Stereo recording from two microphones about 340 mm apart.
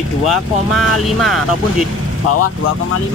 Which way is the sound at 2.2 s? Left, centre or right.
Left.